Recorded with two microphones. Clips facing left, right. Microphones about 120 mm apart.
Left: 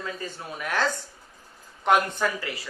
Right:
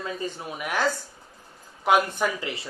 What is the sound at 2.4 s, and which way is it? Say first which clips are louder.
Speech: right 1 dB; 20° right (ahead or behind).